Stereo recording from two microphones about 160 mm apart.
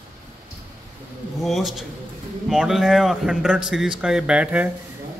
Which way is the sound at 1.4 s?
Centre (ahead or behind).